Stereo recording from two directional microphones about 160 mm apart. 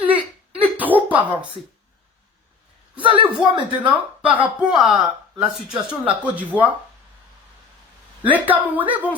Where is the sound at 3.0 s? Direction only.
30° right (ahead or behind).